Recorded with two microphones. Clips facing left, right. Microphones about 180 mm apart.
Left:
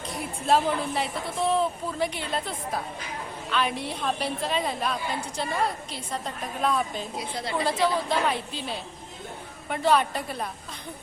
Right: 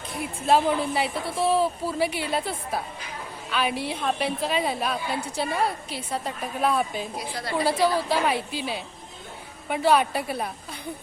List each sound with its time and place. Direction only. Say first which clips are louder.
0.4 s a woman's voice: right 2 dB; centre (ahead or behind)
7.2 s a woman's voice: even; 25° left (ahead or behind)
7.6 s a woman's voice: right 3 dB; 5° right (ahead or behind)